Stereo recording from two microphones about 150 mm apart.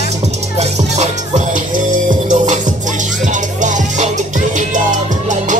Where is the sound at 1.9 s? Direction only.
60° right (ahead or behind).